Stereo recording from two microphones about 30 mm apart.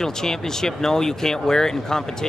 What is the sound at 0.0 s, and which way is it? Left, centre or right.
Speech, centre.